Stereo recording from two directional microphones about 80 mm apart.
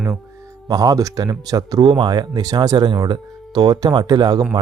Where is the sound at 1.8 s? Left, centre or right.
Right.